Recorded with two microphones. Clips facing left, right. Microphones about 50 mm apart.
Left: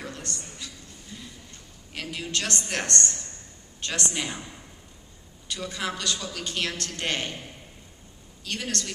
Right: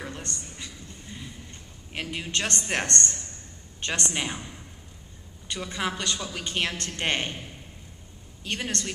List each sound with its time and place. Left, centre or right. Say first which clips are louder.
0.0 s a sound: even; right
2.0 s a woman's voice: right 1 dB; right
5.5 s a man's voice: right 1 dB; right
8.5 s a man's voice: right 1 dB; right